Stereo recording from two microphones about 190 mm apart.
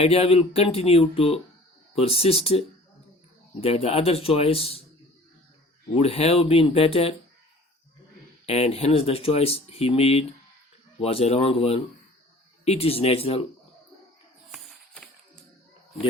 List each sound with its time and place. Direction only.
0.0 s speech: 30° left (ahead or behind)
5.9 s speech: 30° left (ahead or behind)
8.4 s speech: 30° left (ahead or behind)
14.5 s a sound: centre (ahead or behind)